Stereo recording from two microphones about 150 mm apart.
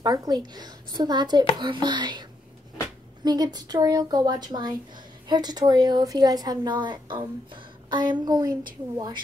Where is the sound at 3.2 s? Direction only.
25° right (ahead or behind).